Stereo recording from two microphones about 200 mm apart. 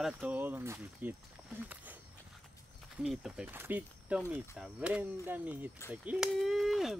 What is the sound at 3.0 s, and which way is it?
Speech, 5° right (ahead or behind).